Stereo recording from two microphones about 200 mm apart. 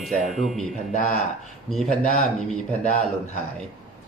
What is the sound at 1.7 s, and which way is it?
Speech, centre (ahead or behind).